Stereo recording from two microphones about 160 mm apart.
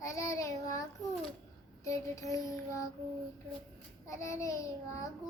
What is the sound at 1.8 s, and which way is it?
Child singing, 20° left (ahead or behind).